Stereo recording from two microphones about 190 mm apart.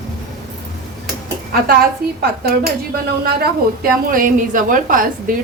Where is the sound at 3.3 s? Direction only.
50° right (ahead or behind).